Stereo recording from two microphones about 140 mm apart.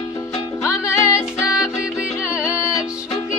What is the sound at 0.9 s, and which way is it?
Music, 20° left (ahead or behind).